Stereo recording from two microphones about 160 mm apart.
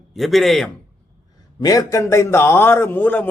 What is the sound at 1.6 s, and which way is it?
A man's voice, 20° left (ahead or behind).